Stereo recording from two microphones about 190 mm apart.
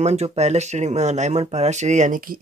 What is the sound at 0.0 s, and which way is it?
Speech, 35° right (ahead or behind).